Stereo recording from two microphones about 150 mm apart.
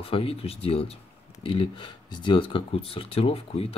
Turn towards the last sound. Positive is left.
turn(degrees=40)  # may be behind; listen again after turning